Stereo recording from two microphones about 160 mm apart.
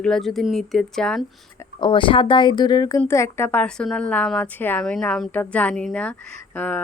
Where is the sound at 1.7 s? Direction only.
30° left (ahead or behind).